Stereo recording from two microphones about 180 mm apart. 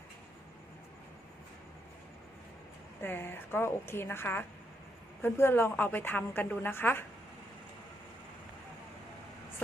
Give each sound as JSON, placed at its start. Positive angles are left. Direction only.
{"t": 3.0, "sound": "a woman's voice", "side_deg": 10}